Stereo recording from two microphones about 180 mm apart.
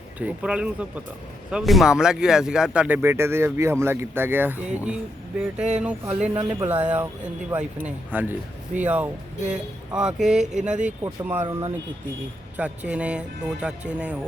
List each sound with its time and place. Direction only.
0.2 s speech: 5° right (ahead or behind)
11.0 s speech: 15° right (ahead or behind)